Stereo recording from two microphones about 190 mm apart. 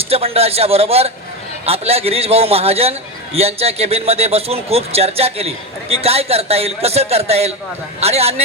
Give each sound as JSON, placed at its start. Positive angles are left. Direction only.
{"t": 0.0, "sound": "a man's voice", "side_deg": -30}